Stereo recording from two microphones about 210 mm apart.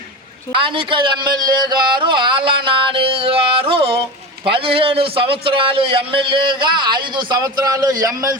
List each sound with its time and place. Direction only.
0.5 s a man's voice: 25° right (ahead or behind)